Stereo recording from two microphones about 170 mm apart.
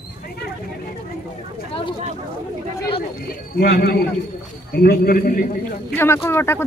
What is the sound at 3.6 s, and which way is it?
A man's voice, 60° left (ahead or behind).